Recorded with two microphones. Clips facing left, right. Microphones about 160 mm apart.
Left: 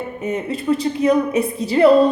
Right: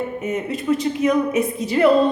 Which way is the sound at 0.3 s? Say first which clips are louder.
Left 2 dB; 30° left (ahead or behind).